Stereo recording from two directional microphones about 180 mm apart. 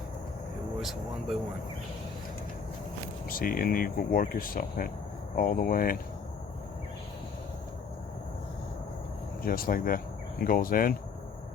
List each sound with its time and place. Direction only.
0.8 s air conditioning: centre (ahead or behind)
3.2 s speech: 55° left (ahead or behind)
9.4 s speech: 55° left (ahead or behind)